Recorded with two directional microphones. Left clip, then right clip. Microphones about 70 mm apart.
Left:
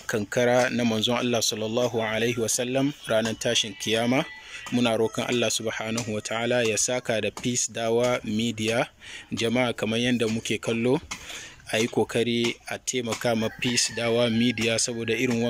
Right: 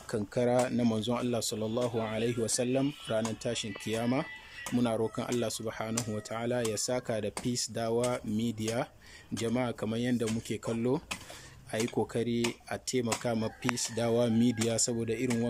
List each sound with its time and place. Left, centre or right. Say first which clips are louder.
0.3 s speech: left 7 dB; right
1.1 s speech: left 8 dB; centre
2.8 s speech: left 7 dB; centre
13.9 s speech: left 2 dB; right
14.9 s speech: left 6 dB; centre